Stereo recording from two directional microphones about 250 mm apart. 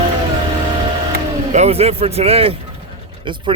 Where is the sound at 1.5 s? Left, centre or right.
Right.